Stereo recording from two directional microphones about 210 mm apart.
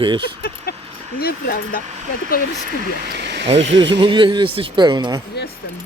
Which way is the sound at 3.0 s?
50° right (ahead or behind).